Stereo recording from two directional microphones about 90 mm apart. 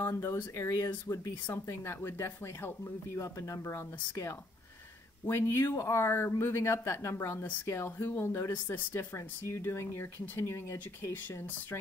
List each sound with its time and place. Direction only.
0.0 s speech: 30° left (ahead or behind)